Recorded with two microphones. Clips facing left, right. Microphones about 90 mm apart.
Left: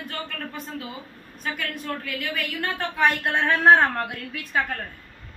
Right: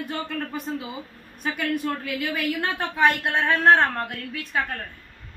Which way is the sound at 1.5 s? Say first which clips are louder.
Right 7 dB; 5° right (ahead or behind).